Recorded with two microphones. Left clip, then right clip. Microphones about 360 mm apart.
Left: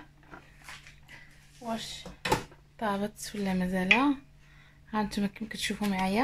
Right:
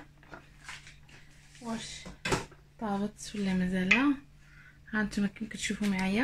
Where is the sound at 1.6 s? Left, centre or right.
Left.